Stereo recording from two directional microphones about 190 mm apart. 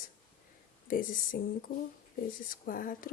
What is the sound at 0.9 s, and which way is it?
Speech, 45° left (ahead or behind).